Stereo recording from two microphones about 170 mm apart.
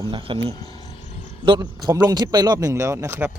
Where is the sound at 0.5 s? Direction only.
25° left (ahead or behind).